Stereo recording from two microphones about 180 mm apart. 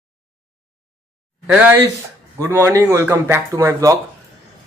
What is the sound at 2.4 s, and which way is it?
Speech, 15° right (ahead or behind).